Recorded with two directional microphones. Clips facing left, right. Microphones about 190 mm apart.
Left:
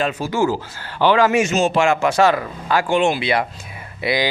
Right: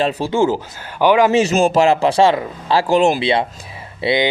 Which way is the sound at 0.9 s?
15° right (ahead or behind).